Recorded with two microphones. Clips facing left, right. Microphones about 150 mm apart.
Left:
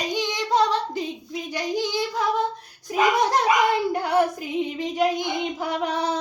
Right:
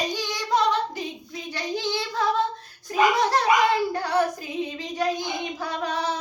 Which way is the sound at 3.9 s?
20° left (ahead or behind).